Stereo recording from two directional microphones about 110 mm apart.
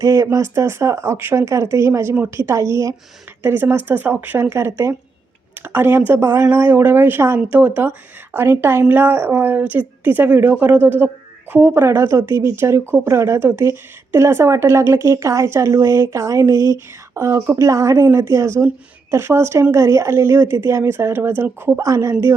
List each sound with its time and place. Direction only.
0.0 s a woman's voice: 30° right (ahead or behind)